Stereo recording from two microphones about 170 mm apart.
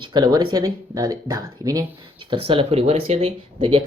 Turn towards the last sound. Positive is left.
turn(degrees=-30)  # may be behind; listen again after turning